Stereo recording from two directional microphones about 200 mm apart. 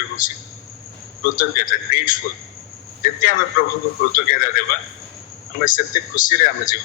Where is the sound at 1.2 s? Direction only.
45° left (ahead or behind).